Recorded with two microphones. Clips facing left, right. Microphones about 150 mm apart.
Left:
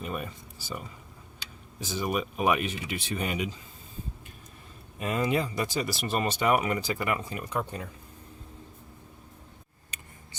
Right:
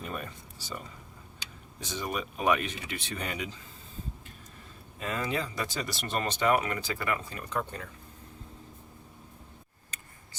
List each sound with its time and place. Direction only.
0.0 s speech: 10° left (ahead or behind)
1.8 s speech: 5° left (ahead or behind)
4.9 s speech: 15° left (ahead or behind)
9.9 s a sound: 20° left (ahead or behind)